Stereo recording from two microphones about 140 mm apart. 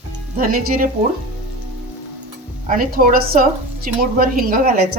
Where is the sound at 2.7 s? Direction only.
85° right.